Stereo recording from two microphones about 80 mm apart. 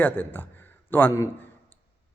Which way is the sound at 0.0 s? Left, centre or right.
Left.